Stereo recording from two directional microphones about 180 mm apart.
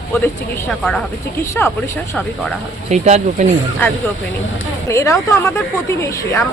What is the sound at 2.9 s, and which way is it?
Speech, 40° right (ahead or behind).